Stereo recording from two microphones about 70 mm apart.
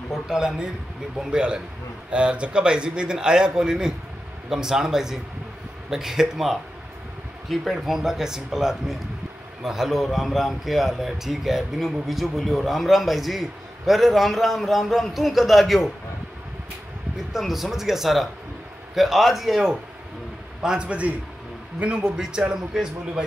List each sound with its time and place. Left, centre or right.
0.1 s a man's voice: centre
17.3 s a man's voice: centre
20.6 s a man's voice: centre